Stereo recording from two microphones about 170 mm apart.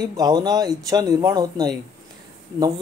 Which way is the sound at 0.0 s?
20° right (ahead or behind).